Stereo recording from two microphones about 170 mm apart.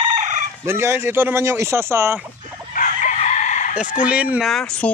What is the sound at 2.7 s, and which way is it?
Chicken, 50° left (ahead or behind).